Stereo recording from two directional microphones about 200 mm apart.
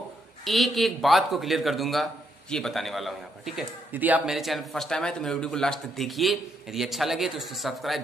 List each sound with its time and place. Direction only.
0.5 s a man's voice: centre (ahead or behind)